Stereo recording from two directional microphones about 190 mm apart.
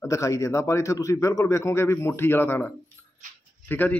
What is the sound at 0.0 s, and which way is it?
A man's voice, 15° left (ahead or behind).